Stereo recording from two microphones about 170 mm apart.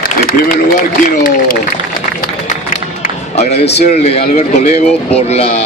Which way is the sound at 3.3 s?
40° left (ahead or behind).